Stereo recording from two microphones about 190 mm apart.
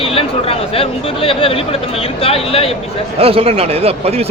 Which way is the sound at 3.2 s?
30° right (ahead or behind).